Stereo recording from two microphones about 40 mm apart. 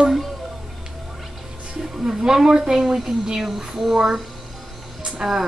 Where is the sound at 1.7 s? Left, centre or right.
Centre.